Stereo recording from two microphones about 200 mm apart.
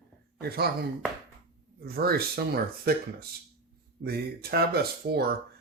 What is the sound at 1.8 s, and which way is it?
Speech, 50° right (ahead or behind).